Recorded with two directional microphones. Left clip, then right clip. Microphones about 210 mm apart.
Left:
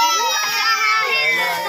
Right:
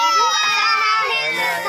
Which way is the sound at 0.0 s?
10° left (ahead or behind).